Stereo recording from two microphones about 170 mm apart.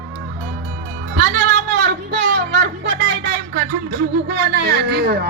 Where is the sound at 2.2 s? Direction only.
85° right.